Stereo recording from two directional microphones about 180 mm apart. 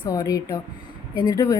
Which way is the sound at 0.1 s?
20° left (ahead or behind).